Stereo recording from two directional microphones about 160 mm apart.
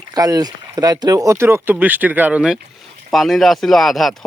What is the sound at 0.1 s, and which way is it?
Speech, 25° right (ahead or behind).